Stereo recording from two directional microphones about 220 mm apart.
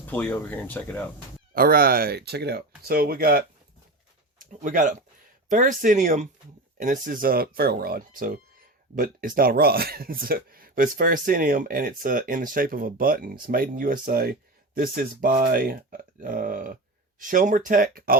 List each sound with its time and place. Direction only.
0.0 s speech: 10° left (ahead or behind)
1.5 s speech: 40° right (ahead or behind)